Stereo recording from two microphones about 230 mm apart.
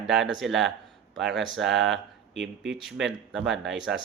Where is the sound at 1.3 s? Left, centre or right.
Right.